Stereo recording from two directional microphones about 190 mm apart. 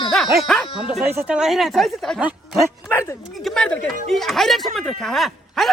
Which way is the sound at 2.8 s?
15° left (ahead or behind).